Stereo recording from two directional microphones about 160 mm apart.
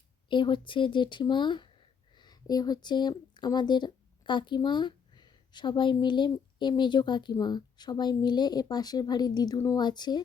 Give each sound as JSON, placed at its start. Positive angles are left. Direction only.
{"t": 0.3, "sound": "speech", "side_deg": 30}